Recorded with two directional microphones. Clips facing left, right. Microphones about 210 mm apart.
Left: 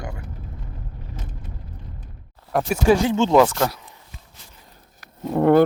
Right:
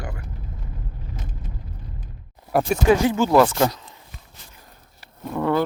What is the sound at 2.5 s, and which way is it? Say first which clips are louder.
Speech: right 2 dB; 5° right (ahead or behind).